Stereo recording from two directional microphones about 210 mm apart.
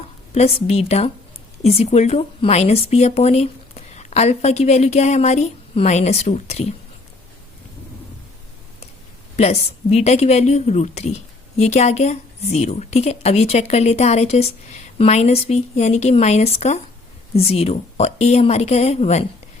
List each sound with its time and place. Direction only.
0.3 s a woman's voice: 30° left (ahead or behind)
9.3 s a woman's voice: 30° left (ahead or behind)